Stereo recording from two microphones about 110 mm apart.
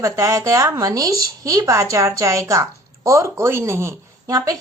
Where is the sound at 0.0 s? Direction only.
30° right (ahead or behind).